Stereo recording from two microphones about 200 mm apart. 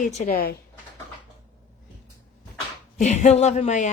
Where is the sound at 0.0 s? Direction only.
35° left (ahead or behind).